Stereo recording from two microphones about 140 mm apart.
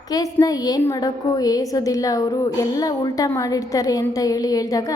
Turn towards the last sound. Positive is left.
turn(degrees=25)  # may be behind; listen again after turning